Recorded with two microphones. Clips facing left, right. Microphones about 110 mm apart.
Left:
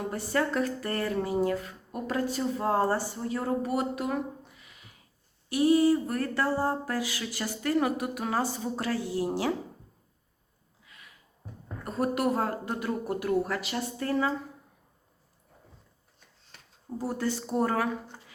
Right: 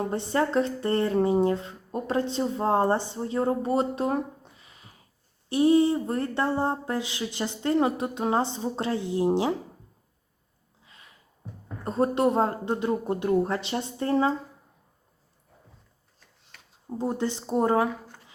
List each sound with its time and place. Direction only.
0.0 s speech: 25° right (ahead or behind)
10.8 s a sound: 30° right (ahead or behind)
11.9 s speech: 25° right (ahead or behind)
17.0 s speech: 20° right (ahead or behind)